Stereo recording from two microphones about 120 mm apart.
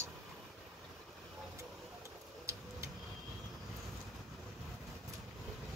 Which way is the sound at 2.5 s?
25° right (ahead or behind).